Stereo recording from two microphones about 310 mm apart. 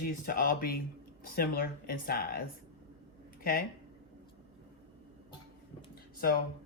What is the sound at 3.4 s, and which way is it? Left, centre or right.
Speech, left.